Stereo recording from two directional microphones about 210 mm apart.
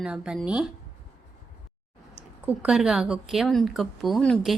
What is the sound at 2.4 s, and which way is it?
A woman's voice, 5° right (ahead or behind).